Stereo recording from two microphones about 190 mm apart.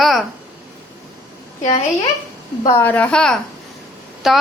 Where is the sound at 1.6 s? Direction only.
35° left (ahead or behind).